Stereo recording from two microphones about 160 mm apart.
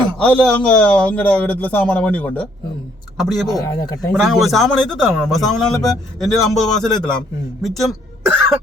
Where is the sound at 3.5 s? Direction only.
20° left (ahead or behind).